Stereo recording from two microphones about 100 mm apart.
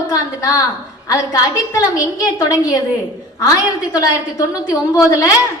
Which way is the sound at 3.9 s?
35° left (ahead or behind).